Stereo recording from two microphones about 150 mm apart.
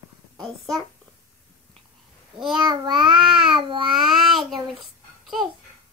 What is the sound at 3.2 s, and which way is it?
Babbling, centre (ahead or behind).